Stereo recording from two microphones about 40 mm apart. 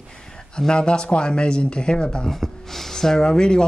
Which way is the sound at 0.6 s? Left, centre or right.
Left.